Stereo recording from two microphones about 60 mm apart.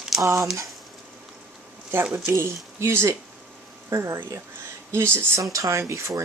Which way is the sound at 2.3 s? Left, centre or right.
Right.